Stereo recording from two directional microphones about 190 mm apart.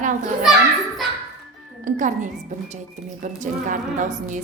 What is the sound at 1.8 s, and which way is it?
Speech, 40° right (ahead or behind).